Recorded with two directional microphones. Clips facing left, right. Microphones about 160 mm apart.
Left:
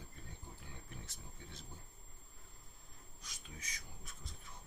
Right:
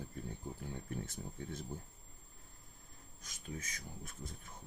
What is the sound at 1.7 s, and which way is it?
Speech, 50° right (ahead or behind).